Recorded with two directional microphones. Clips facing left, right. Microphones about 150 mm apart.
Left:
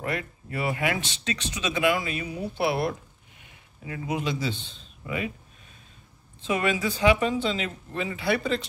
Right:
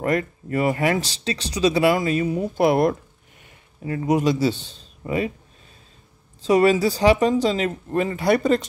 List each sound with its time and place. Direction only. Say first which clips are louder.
0.0 s speech: right 9 dB; 45° right (ahead or behind)
6.4 s speech: right 9 dB; 35° right (ahead or behind)